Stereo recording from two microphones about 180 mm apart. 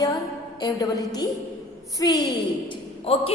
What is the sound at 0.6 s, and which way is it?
A woman's voice, 20° left (ahead or behind).